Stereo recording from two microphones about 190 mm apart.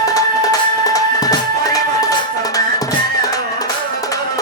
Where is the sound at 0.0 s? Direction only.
20° left (ahead or behind).